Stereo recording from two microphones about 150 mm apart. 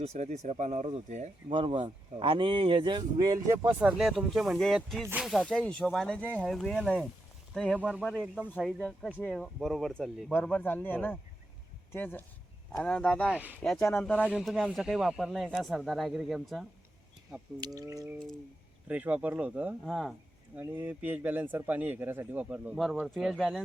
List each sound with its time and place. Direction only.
0.0 s speech: 50° right (ahead or behind)
1.5 s speech: 35° right (ahead or behind); by 3.8 s 20° right (ahead or behind)
3.8 s speech: 5° right (ahead or behind)
7.8 s speech: 10° right (ahead or behind)
8.5 s a man's voice: 5° left (ahead or behind)
12.7 s speech: 5° left (ahead or behind)
13.3 s speech: 10° right (ahead or behind)
13.6 s speech: 5° left (ahead or behind)
17.6 s speech: 25° right (ahead or behind)
18.9 s speech: 10° right (ahead or behind)
19.8 s speech: centre (ahead or behind)
20.6 s speech: 15° right (ahead or behind)